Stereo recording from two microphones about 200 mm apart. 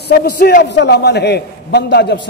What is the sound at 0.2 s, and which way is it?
A man's voice, 50° left (ahead or behind).